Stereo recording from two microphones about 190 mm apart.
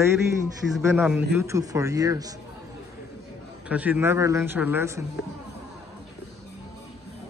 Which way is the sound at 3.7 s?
10° right (ahead or behind).